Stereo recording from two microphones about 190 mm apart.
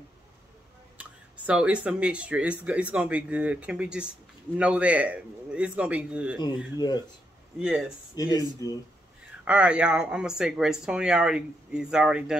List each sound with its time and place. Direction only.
0.9 s a man's voice: 5° right (ahead or behind)
7.5 s speech: 5° right (ahead or behind)
8.1 s speech: 20° left (ahead or behind)
9.4 s speech: 5° right (ahead or behind)